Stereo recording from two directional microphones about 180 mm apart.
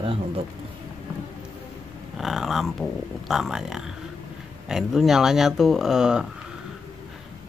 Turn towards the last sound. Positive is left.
turn(degrees=-5)  # may be behind; listen again after turning